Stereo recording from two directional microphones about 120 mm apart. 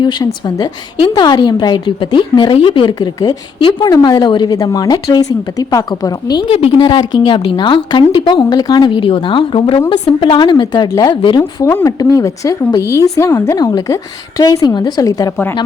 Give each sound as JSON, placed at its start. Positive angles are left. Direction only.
{"t": 0.0, "sound": "a woman's voice", "side_deg": 40}
{"t": 6.5, "sound": "a woman's voice", "side_deg": 55}
{"t": 11.3, "sound": "a woman's voice", "side_deg": 25}